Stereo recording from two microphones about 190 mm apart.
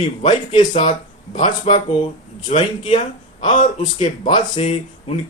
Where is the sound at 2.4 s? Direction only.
35° left (ahead or behind).